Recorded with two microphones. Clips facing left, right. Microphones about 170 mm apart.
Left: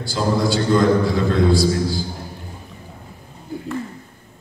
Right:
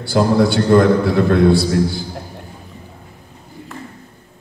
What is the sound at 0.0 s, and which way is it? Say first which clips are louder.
A man's voice: right 6 dB; 60° right (ahead or behind).